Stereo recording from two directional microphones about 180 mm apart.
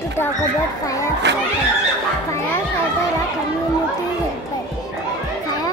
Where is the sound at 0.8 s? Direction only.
20° left (ahead or behind).